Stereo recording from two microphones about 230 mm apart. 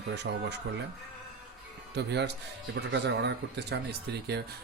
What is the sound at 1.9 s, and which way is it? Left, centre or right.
Speech, right.